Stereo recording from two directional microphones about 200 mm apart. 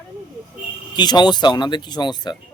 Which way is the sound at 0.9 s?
20° left (ahead or behind).